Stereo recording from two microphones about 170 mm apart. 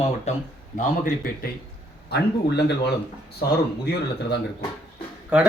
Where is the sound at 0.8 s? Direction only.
55° left (ahead or behind).